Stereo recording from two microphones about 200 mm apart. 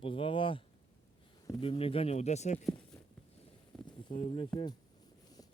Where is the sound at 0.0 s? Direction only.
25° left (ahead or behind).